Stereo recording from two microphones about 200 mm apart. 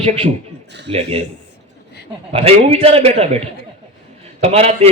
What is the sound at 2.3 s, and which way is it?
A man's voice, 30° right (ahead or behind).